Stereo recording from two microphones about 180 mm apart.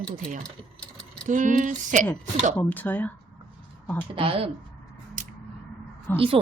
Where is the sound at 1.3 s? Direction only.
45° right (ahead or behind).